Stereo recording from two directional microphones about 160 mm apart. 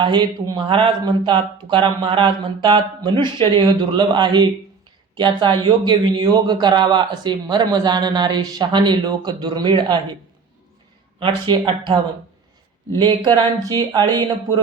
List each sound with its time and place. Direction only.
0.0 s speech: 25° right (ahead or behind)
11.2 s speech: 30° right (ahead or behind)
13.0 s speech: 30° right (ahead or behind)